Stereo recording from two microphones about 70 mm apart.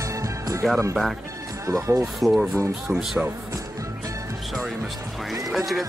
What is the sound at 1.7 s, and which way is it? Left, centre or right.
Speech, right.